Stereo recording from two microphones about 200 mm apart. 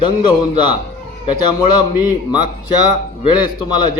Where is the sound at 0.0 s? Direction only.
20° left (ahead or behind).